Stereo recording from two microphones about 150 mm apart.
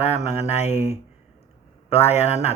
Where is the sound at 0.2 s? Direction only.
45° left (ahead or behind).